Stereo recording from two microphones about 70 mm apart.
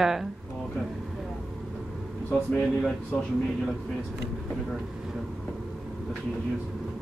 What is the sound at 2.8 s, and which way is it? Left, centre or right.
Speech, centre.